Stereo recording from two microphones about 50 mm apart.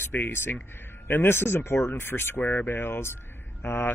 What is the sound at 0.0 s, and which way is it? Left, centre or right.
Speech, left.